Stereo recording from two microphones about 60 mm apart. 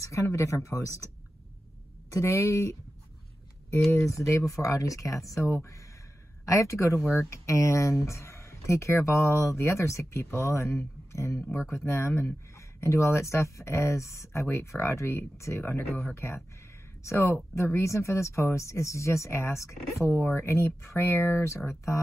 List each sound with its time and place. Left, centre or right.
0.0 s speech: left
2.0 s speech: left
4.3 s speech: left
17.0 s speech: left
21.6 s speech: left